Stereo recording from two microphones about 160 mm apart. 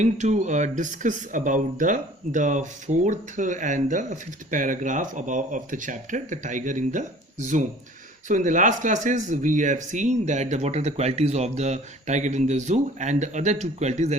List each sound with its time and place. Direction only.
0.0 s speech: 45° right (ahead or behind)
8.3 s speech: 55° right (ahead or behind)